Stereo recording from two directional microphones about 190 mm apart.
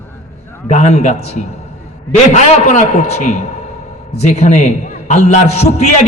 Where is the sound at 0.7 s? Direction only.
35° left (ahead or behind).